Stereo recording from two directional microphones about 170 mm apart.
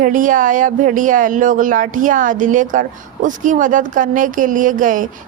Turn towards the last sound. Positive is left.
turn(degrees=-50)  # may be behind; listen again after turning